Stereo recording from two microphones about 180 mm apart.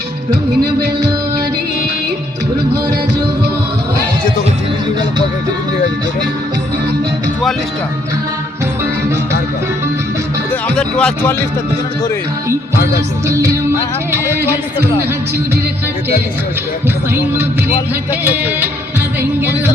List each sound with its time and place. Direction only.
10.5 s music: 5° left (ahead or behind)
13.3 s speech: 15° right (ahead or behind)
14.1 s music: 15° right (ahead or behind)
18.1 s speech: 10° right (ahead or behind)